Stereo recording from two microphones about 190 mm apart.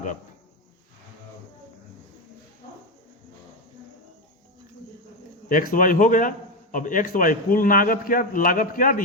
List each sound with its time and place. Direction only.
5.5 s a man's voice: 45° left (ahead or behind)